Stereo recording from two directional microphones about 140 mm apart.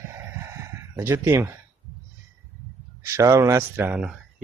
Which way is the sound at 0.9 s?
20° right (ahead or behind).